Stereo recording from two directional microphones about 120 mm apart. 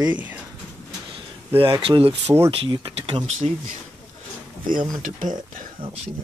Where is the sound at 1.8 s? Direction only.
45° right (ahead or behind).